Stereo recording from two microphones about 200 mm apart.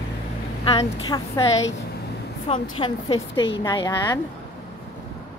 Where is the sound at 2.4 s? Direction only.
30° left (ahead or behind).